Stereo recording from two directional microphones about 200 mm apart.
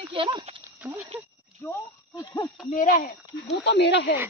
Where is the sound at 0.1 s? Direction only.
25° right (ahead or behind).